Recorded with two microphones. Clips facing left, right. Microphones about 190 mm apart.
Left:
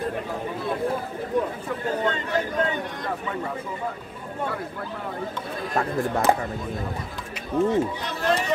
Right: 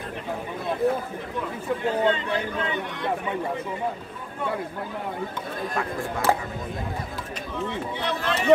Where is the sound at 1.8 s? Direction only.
45° left (ahead or behind).